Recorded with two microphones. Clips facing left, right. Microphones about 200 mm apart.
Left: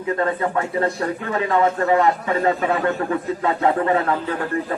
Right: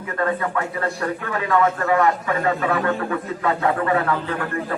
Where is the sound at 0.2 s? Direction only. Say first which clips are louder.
Right 3 dB; 25° left (ahead or behind).